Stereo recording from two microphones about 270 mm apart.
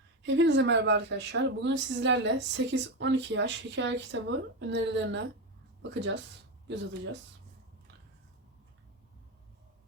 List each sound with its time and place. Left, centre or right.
0.2 s speech: right